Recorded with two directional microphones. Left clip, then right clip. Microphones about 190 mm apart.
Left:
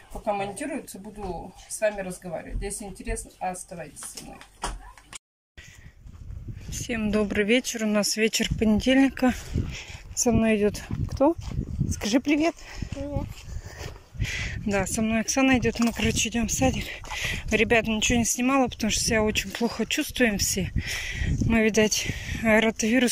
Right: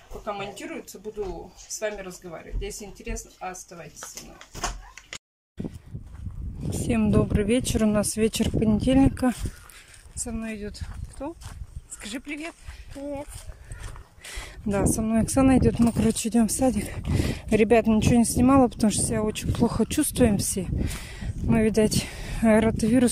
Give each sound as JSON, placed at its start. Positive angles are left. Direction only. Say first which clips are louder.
{"t": 0.2, "sound": "speech", "louder": "left 5 dB", "side_deg": 0}
{"t": 1.8, "sound": "speech", "louder": "left 5 dB", "side_deg": 0}
{"t": 6.7, "sound": "speech", "louder": "right 3 dB", "side_deg": -15}
{"t": 10.2, "sound": "speech", "louder": "left 13 dB", "side_deg": 35}
{"t": 14.3, "sound": "speech", "louder": "left 2 dB", "side_deg": -10}